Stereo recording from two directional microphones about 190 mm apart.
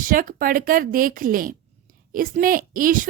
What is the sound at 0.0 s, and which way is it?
Speech, 45° right (ahead or behind).